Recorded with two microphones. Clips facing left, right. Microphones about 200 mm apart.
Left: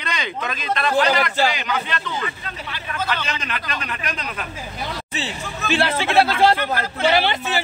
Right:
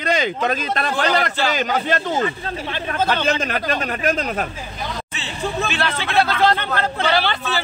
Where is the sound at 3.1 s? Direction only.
45° right (ahead or behind).